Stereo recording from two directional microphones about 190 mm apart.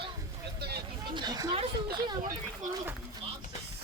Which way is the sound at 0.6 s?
55° right (ahead or behind).